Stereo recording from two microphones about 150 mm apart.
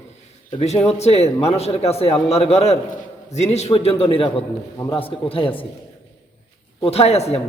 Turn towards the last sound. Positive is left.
turn(degrees=45)  # may be behind; listen again after turning